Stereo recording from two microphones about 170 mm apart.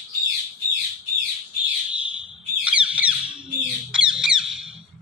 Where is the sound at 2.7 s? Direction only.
5° right (ahead or behind).